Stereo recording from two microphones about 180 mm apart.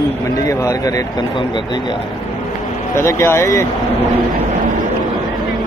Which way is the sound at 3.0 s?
15° left (ahead or behind).